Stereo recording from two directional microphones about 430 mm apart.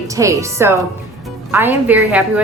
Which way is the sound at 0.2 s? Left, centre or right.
Centre.